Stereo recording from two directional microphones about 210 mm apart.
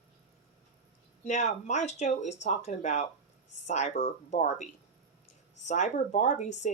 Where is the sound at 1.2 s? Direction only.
35° left (ahead or behind).